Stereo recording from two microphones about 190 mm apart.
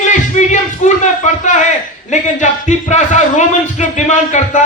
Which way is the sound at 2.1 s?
40° left (ahead or behind).